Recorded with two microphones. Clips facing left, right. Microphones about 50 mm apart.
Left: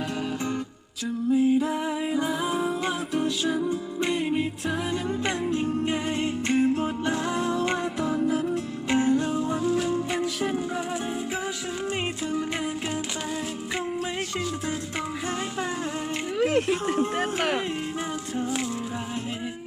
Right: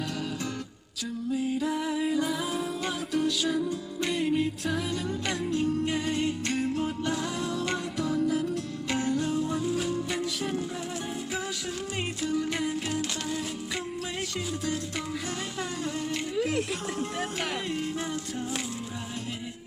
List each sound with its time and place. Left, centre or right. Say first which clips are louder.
1.3 s music: left 7 dB; left
12.2 s music: left 1 dB; left
16.4 s a sound: left 8 dB; left